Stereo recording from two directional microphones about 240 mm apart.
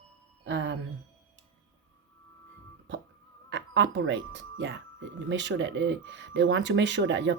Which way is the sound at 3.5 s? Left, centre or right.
Right.